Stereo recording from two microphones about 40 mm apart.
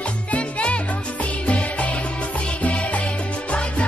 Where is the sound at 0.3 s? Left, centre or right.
Left.